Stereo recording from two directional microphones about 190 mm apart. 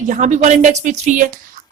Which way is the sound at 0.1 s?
40° right (ahead or behind).